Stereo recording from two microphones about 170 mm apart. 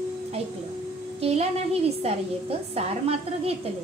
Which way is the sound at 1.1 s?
35° right (ahead or behind).